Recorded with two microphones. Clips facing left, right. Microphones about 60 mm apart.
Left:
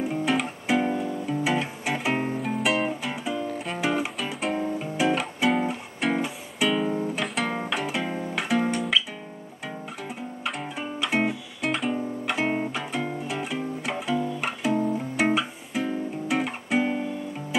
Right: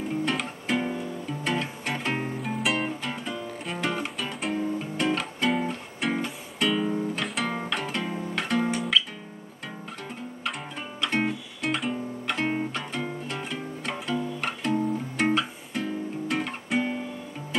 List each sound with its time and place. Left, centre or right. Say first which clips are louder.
0.1 s music: left 3 dB; centre
10.4 s music: left 3 dB; centre